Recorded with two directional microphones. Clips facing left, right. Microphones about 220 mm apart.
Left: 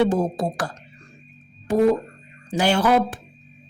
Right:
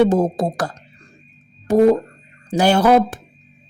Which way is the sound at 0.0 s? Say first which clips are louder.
Right 5 dB; 45° right (ahead or behind).